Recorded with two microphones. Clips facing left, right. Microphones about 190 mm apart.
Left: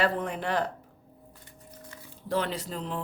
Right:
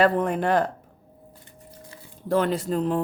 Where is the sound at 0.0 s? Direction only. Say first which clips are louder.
Right 7 dB; 50° right (ahead or behind).